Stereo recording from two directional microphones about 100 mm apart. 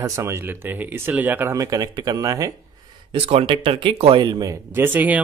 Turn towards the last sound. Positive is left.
turn(degrees=-15)  # may be behind; listen again after turning